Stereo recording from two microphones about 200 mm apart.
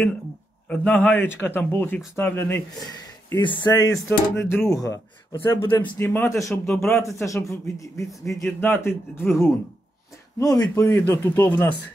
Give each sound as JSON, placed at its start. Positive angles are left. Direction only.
{"t": 0.7, "sound": "speech", "side_deg": 5}